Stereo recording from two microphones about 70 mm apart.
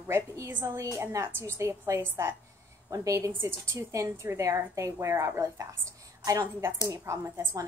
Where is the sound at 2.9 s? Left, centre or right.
Right.